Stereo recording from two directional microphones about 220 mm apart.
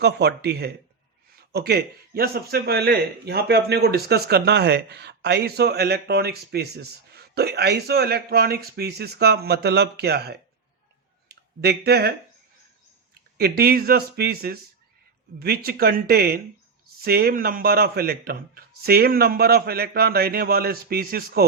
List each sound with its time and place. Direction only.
0.0 s a man's voice: 50° right (ahead or behind)
13.3 s a man's voice: 45° right (ahead or behind)